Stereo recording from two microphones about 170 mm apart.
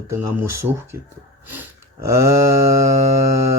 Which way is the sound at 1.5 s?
15° right (ahead or behind).